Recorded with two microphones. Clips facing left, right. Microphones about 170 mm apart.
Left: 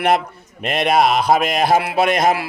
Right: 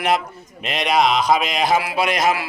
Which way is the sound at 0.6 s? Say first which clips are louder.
Left 3 dB; 50° left (ahead or behind).